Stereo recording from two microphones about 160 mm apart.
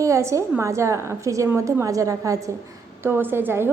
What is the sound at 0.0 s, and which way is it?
A woman's voice, 20° right (ahead or behind).